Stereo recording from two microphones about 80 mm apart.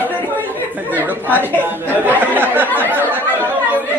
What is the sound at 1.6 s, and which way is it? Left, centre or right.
A man's voice, right.